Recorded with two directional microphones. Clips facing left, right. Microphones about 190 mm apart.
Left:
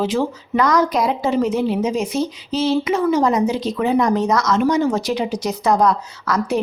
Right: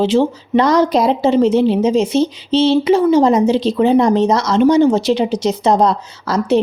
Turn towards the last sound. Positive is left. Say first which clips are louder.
# right 5 dB
turn(degrees=-30)  # may be behind; listen again after turning